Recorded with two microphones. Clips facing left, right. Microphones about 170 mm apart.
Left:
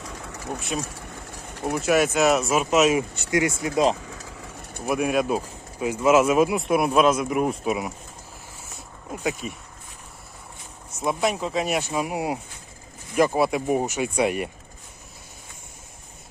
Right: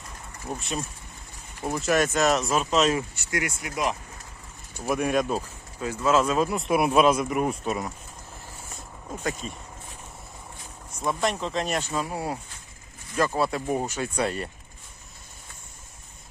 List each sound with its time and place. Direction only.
0.0 s engine: 90° left
0.8 s a sound: 80° left
1.9 s speech: 5° left (ahead or behind)
2.9 s speech: 25° left (ahead or behind)
3.9 s vehicle: 90° left
4.9 s speech: 5° left (ahead or behind)
5.8 s speech: 15° left (ahead or behind)
6.6 s speech: centre (ahead or behind)
9.2 s speech: 10° left (ahead or behind)
11.0 s speech: 10° left (ahead or behind)